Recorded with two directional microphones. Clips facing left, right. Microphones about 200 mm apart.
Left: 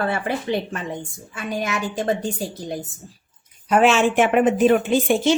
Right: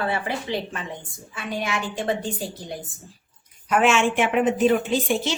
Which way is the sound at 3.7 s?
35° left (ahead or behind).